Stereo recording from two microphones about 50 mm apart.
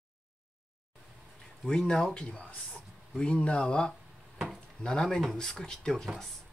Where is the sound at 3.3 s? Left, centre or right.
Left.